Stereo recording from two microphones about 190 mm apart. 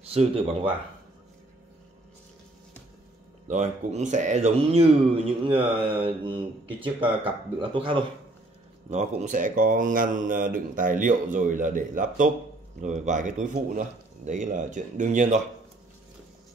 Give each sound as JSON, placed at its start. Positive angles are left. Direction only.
{"t": 0.1, "sound": "speech", "side_deg": -30}
{"t": 3.4, "sound": "speech", "side_deg": -40}
{"t": 8.9, "sound": "speech", "side_deg": -40}